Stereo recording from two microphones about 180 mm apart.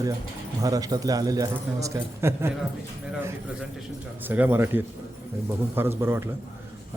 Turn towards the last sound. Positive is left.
turn(degrees=-15)  # may be behind; listen again after turning